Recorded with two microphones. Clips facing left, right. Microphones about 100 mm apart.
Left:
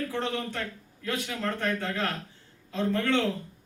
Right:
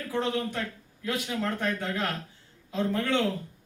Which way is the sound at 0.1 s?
15° right (ahead or behind).